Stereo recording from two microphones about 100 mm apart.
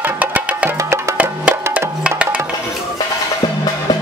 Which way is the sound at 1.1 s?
15° right (ahead or behind).